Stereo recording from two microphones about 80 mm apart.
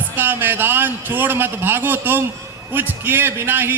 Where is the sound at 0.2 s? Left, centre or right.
Right.